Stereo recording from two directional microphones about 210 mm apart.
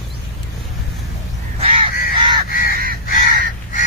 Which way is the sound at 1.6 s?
25° right (ahead or behind).